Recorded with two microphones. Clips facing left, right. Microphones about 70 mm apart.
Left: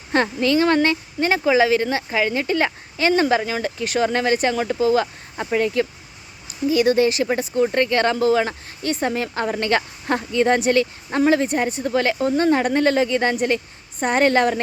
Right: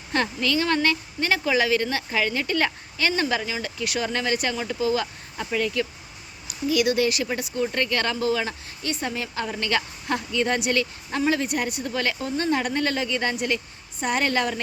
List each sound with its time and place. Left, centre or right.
0.1 s speech: left